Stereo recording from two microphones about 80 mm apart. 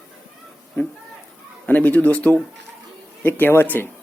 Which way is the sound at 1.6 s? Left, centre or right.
Centre.